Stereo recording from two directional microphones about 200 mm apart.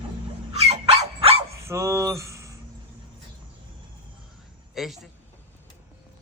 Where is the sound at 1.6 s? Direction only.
15° right (ahead or behind).